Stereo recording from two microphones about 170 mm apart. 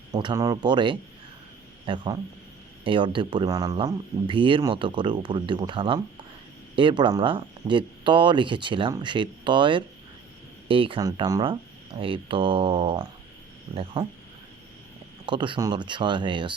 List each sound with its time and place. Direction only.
0.1 s speech: 25° right (ahead or behind)
15.3 s speech: 30° right (ahead or behind)